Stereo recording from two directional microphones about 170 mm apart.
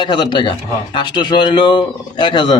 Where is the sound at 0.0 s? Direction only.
25° left (ahead or behind).